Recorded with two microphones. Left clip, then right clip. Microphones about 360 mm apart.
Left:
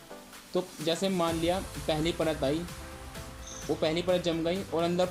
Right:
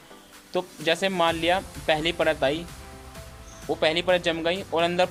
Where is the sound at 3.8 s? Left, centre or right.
Right.